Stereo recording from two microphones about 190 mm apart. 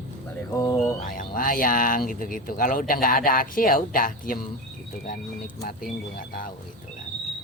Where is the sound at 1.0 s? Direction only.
45° left (ahead or behind).